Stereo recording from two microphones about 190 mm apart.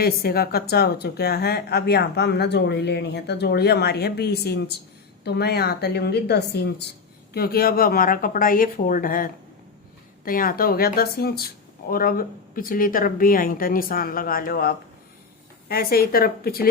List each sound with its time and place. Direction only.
0.0 s speech: 55° left (ahead or behind)